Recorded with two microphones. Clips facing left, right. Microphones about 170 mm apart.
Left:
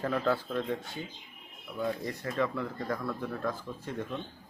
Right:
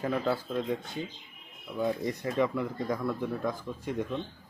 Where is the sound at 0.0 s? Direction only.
10° right (ahead or behind).